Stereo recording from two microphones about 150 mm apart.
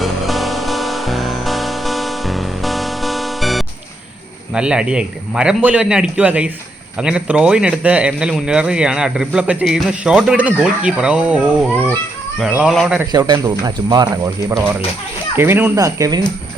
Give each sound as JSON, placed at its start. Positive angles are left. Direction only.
{"t": 0.0, "sound": "music", "side_deg": 0}
{"t": 4.5, "sound": "speech", "side_deg": -5}
{"t": 13.1, "sound": "speech", "side_deg": -25}